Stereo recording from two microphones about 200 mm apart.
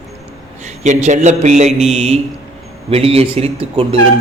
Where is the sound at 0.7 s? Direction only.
35° right (ahead or behind).